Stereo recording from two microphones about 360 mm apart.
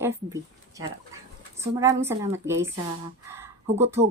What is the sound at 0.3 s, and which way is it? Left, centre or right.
Speech, centre.